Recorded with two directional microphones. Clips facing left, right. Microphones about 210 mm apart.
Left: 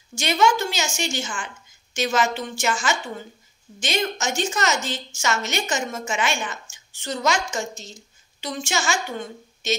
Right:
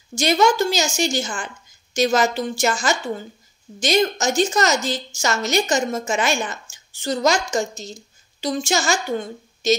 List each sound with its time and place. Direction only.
0.1 s a woman's voice: 40° right (ahead or behind)